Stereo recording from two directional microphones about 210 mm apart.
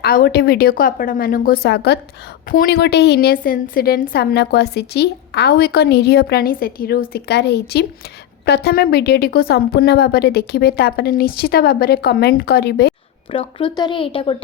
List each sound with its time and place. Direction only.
0.0 s a woman's voice: 45° left (ahead or behind)
13.3 s speech: 25° left (ahead or behind)